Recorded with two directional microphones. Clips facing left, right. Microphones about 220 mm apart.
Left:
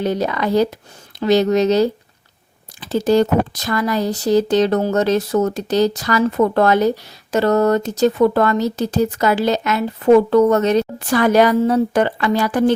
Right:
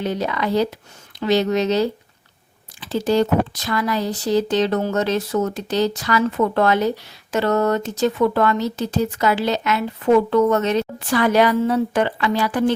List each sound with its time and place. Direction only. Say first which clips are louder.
0.0 s speech: left 3 dB; 40° left (ahead or behind)